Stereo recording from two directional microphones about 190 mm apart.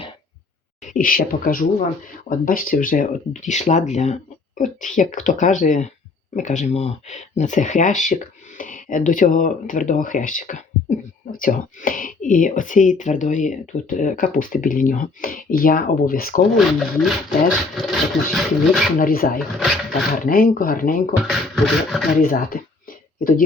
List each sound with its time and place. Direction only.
0.8 s speech: 45° left (ahead or behind)
16.6 s speech: centre (ahead or behind)
18.9 s speech: 50° left (ahead or behind)
21.2 s speech: centre (ahead or behind)
22.2 s speech: 50° left (ahead or behind)